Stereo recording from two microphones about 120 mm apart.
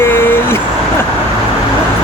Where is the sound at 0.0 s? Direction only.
20° left (ahead or behind).